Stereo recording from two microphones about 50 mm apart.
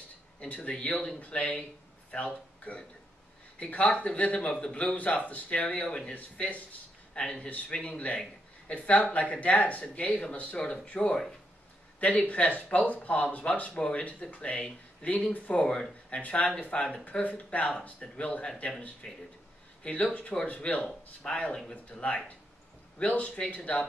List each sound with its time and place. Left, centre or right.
0.4 s speech: left
19.0 s speech: centre
19.8 s speech: left